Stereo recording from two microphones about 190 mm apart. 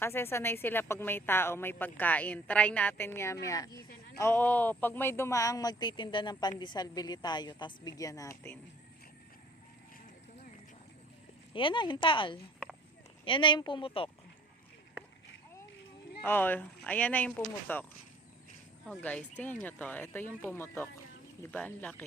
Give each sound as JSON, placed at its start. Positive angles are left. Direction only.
{"t": 0.0, "sound": "a woman's voice", "side_deg": 10}
{"t": 11.5, "sound": "a woman's voice", "side_deg": 25}
{"t": 16.2, "sound": "a woman's voice", "side_deg": 10}
{"t": 18.9, "sound": "a woman's voice", "side_deg": 5}